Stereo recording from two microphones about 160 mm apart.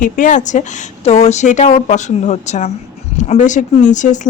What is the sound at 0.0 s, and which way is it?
Speech, 55° left (ahead or behind).